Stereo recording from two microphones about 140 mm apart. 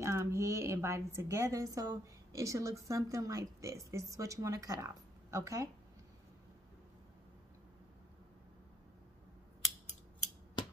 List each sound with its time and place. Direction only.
0.0 s a woman's voice: 20° right (ahead or behind)